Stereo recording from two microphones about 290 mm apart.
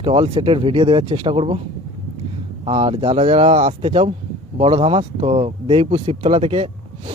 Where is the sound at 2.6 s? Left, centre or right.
Centre.